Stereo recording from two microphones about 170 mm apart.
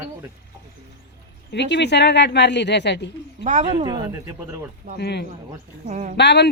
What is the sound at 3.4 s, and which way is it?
Speech, 45° right (ahead or behind).